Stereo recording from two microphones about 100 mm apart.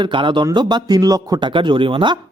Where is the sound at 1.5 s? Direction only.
55° right (ahead or behind).